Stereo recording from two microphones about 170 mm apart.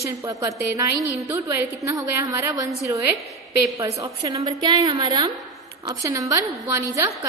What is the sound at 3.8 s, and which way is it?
A woman's voice, 20° right (ahead or behind).